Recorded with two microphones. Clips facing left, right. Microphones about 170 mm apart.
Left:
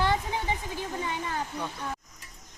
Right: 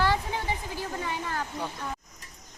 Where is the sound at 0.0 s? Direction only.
20° left (ahead or behind).